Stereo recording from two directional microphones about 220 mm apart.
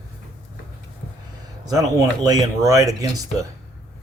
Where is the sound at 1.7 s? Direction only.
15° right (ahead or behind).